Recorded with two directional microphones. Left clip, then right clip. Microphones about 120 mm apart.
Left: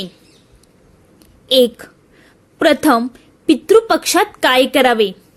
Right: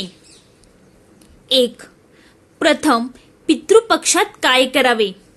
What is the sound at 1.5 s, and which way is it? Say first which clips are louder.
A woman's voice: left 3 dB; 40° left (ahead or behind).